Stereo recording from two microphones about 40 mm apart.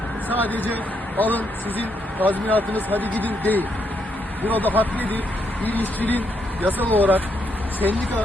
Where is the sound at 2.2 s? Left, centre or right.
Right.